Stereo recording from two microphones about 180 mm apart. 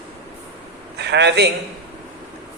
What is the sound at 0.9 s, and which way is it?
Speech, 70° right (ahead or behind).